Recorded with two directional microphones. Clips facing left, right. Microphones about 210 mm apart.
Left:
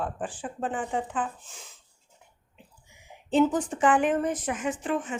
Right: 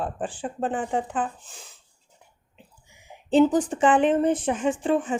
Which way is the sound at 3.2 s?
30° right (ahead or behind).